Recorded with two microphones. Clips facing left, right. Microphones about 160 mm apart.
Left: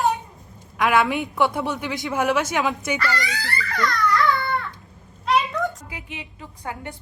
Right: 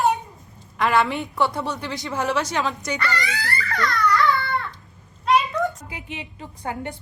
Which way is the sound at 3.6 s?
Centre (ahead or behind).